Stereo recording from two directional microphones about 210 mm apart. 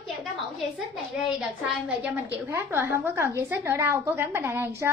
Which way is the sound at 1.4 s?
5° right (ahead or behind).